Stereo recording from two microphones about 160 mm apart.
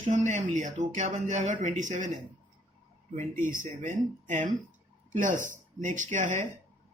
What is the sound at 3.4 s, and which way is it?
Speech, 55° right (ahead or behind).